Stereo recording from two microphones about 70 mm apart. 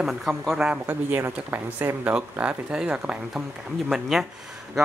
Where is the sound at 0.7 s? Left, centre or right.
Right.